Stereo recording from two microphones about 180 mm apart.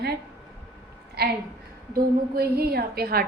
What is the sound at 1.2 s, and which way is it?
A woman's voice, 60° right (ahead or behind).